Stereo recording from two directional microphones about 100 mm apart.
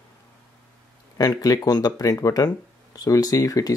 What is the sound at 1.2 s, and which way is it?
Speech, 40° left (ahead or behind).